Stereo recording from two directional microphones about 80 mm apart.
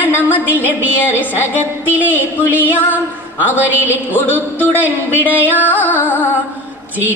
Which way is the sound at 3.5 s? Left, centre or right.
Right.